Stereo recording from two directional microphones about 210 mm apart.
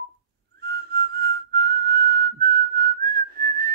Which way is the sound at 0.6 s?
50° right (ahead or behind).